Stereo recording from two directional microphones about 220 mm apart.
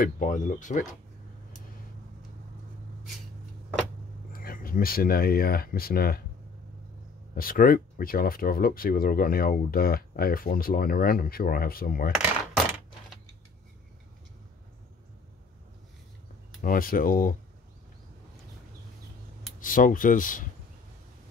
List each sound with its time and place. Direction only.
0.0 s speech: 35° left (ahead or behind)
4.3 s speech: 40° left (ahead or behind)
7.3 s speech: 40° left (ahead or behind)
16.6 s speech: 40° left (ahead or behind)
19.6 s speech: 40° left (ahead or behind)